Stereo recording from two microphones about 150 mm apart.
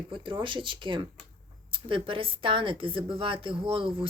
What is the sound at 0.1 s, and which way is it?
A woman's voice, 35° right (ahead or behind).